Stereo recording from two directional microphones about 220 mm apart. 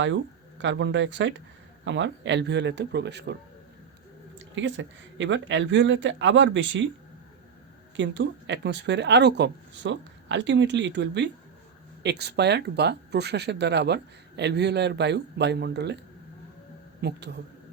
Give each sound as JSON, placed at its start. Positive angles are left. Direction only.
{"t": 0.6, "sound": "speech", "side_deg": -55}
{"t": 4.5, "sound": "speech", "side_deg": -55}
{"t": 7.9, "sound": "speech", "side_deg": -55}
{"t": 17.0, "sound": "speech", "side_deg": -50}